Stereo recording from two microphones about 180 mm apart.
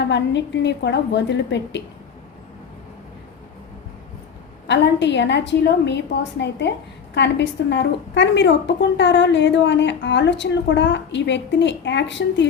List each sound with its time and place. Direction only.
0.0 s a woman's voice: 80° left
4.6 s a woman's voice: 75° left (ahead or behind)